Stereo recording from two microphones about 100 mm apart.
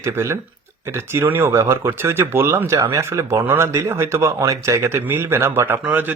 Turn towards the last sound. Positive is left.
turn(degrees=-15)  # may be behind; listen again after turning